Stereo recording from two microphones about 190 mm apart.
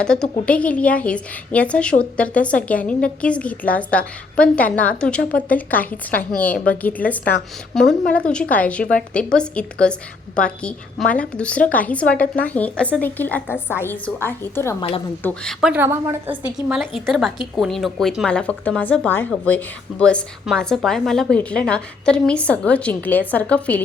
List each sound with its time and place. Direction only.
0.0 s a woman's voice: 5° left (ahead or behind)
14.8 s speech: 30° left (ahead or behind)
15.2 s a woman's voice: 10° left (ahead or behind)
15.6 s a woman's voice: 10° right (ahead or behind); by 23.8 s 5° left (ahead or behind)